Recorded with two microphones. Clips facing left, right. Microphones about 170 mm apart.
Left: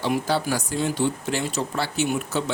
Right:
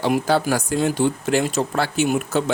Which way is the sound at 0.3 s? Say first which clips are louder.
Right 5 dB; 50° right (ahead or behind).